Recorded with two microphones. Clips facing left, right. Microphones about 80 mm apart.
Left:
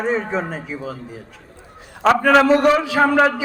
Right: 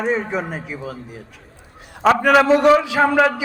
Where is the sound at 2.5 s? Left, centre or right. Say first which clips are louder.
Right 1 dB; centre.